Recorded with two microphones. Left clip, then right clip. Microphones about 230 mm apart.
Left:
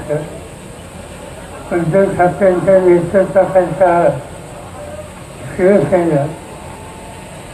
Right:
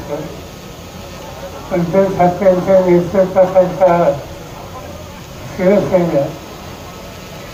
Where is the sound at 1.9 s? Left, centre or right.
Right.